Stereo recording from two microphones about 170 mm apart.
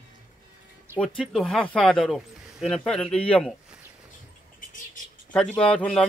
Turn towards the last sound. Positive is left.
turn(degrees=5)  # may be behind; listen again after turning